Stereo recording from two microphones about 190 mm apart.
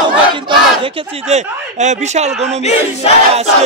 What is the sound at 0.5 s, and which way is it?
Speech, 30° right (ahead or behind).